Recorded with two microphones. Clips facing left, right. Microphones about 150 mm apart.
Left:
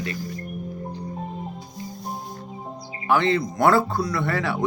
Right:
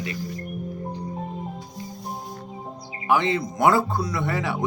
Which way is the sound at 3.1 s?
15° right (ahead or behind).